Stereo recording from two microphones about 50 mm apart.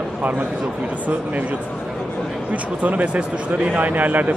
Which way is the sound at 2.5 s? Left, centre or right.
Right.